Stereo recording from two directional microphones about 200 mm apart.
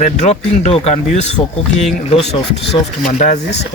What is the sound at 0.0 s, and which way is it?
Speech, 35° left (ahead or behind).